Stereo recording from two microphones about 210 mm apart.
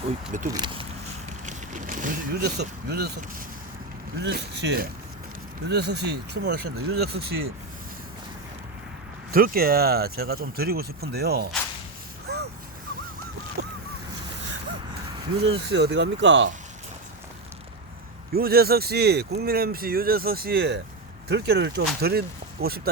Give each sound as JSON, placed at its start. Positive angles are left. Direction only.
{"t": 0.5, "sound": "speech", "side_deg": -25}
{"t": 1.5, "sound": "speech", "side_deg": -35}
{"t": 4.2, "sound": "speech", "side_deg": -55}
{"t": 9.3, "sound": "speech", "side_deg": -45}
{"t": 12.3, "sound": "a sound", "side_deg": -50}
{"t": 13.6, "sound": "goose", "side_deg": -50}
{"t": 15.4, "sound": "speech", "side_deg": -50}
{"t": 18.3, "sound": "speech", "side_deg": -45}